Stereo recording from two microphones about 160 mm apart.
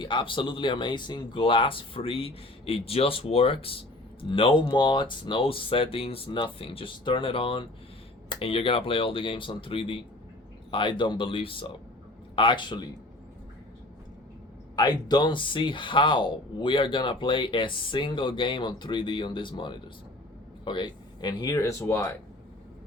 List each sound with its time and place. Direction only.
0.0 s speech: 30° left (ahead or behind)
14.8 s speech: 25° left (ahead or behind)